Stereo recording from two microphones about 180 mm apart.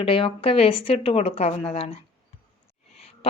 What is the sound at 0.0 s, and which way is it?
A woman's voice, 30° left (ahead or behind).